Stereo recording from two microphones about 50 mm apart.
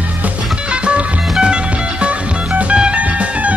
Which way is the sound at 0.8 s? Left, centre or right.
Centre.